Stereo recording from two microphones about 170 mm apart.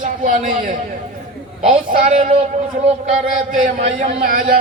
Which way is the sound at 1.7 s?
45° right (ahead or behind).